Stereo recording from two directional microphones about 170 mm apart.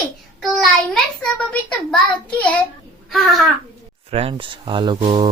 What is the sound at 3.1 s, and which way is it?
Speech, centre (ahead or behind).